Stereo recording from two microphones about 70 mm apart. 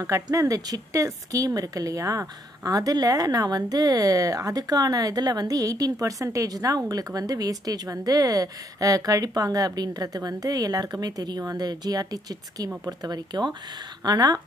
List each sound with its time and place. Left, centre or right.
0.0 s speech: right
14.0 s speech: right